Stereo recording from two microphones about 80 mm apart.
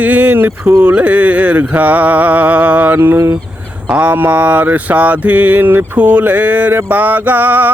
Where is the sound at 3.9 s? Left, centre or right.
Centre.